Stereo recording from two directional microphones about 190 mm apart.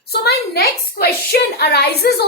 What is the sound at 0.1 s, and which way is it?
A child's voice, 55° left (ahead or behind).